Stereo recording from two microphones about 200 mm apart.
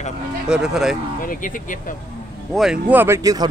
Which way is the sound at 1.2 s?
45° left (ahead or behind).